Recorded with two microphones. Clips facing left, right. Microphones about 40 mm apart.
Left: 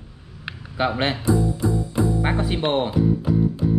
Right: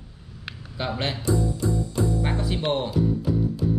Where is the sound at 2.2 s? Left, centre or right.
Left.